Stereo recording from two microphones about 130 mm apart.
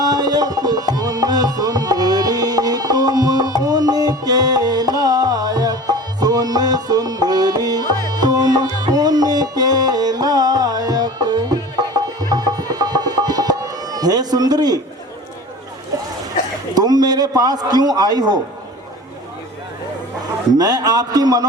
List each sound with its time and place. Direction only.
0.0 s music: 30° right (ahead or behind)
16.7 s a man's voice: 30° right (ahead or behind)
20.6 s a man's voice: 30° right (ahead or behind)